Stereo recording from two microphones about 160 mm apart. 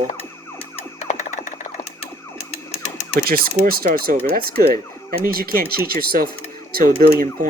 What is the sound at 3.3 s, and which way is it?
Speech, 70° right (ahead or behind).